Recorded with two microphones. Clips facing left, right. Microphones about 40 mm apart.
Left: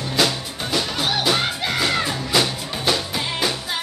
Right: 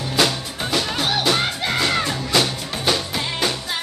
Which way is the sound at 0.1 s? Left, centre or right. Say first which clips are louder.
Right 1 dB; centre.